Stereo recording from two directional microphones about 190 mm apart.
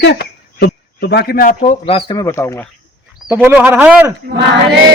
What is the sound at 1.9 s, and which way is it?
Speech, 25° left (ahead or behind).